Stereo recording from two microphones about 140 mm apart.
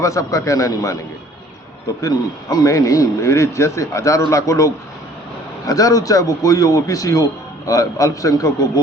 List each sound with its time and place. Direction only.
0.0 s a man's voice: 20° left (ahead or behind)
2.0 s a man's voice: 25° left (ahead or behind)